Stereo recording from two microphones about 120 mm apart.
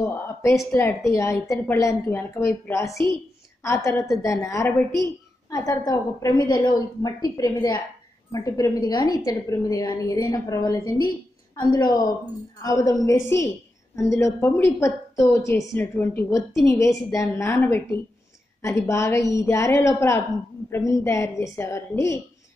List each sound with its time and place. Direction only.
0.0 s a woman's voice: 25° left (ahead or behind)